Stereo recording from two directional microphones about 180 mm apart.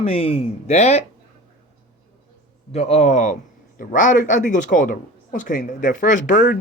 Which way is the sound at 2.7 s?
35° left (ahead or behind).